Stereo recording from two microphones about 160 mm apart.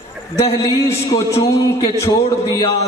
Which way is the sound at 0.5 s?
20° left (ahead or behind).